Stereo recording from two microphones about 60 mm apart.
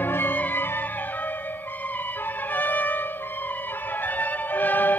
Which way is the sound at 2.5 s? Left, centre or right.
Left.